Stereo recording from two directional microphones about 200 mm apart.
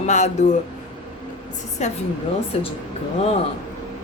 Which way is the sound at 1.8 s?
35° left (ahead or behind).